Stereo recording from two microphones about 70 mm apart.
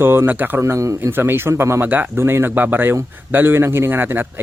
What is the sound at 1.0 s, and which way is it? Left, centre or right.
Speech, right.